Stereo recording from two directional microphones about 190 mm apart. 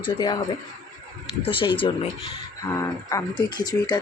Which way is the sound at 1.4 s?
25° left (ahead or behind).